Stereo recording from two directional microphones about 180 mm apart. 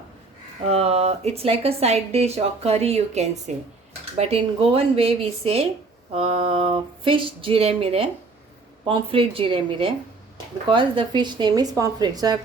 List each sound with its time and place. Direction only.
0.7 s speech: 35° right (ahead or behind)